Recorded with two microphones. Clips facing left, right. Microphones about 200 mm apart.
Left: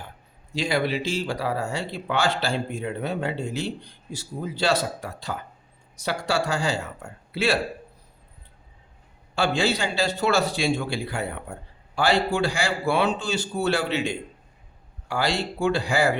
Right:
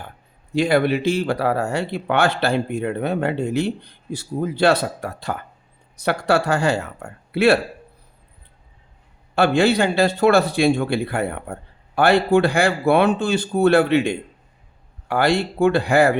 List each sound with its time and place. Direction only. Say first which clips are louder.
0.5 s speech: right 7 dB; 55° right (ahead or behind)
9.3 s speech: right 7 dB; 60° right (ahead or behind)